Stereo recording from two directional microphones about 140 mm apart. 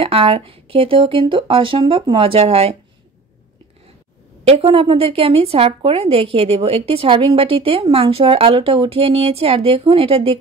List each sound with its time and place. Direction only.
0.0 s speech: 40° right (ahead or behind)
4.5 s a woman's voice: 45° right (ahead or behind)